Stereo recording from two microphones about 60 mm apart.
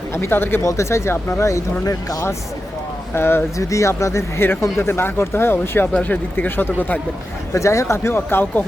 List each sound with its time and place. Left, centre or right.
0.1 s speech: left
0.6 s speech: left
1.4 s speech: left
3.2 s speech: left
3.6 s speech: left
5.9 s speech: left
7.5 s speech: left
7.9 s speech: left